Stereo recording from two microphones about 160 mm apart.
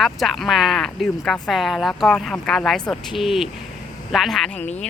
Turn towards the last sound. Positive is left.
turn(degrees=0)  # may be behind; listen again after turning